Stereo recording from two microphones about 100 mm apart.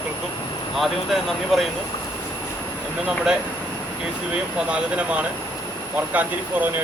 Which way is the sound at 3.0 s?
5° right (ahead or behind).